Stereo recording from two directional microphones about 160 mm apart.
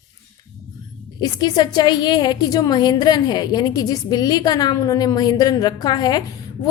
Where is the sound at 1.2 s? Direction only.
25° left (ahead or behind).